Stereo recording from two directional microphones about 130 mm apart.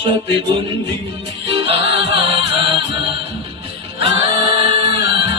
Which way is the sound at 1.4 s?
45° right (ahead or behind).